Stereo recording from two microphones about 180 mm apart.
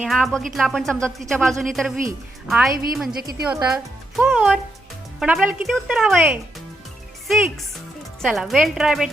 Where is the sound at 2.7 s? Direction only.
55° right (ahead or behind).